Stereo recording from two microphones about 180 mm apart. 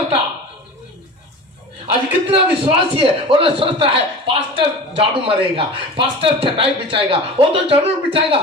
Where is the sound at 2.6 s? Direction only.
30° right (ahead or behind).